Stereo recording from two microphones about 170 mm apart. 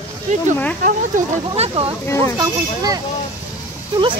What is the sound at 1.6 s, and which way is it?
Speech, 35° right (ahead or behind).